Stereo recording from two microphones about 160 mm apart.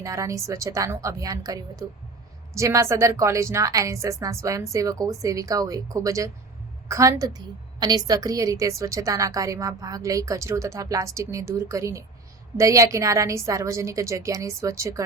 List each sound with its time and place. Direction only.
0.0 s a woman's voice: 20° right (ahead or behind)